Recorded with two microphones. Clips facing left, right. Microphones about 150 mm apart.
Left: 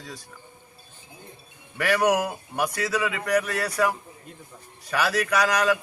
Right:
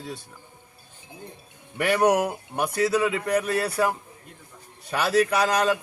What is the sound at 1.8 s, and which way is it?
A man's voice, 25° right (ahead or behind).